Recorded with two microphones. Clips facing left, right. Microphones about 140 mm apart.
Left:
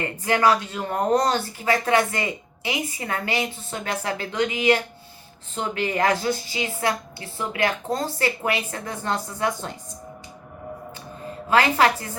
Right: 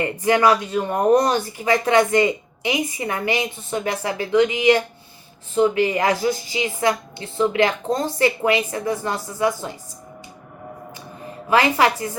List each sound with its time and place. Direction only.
0.2 s a woman's voice: 15° right (ahead or behind)
11.4 s a woman's voice: 15° right (ahead or behind)